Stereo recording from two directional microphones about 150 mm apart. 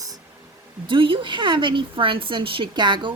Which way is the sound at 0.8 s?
35° right (ahead or behind).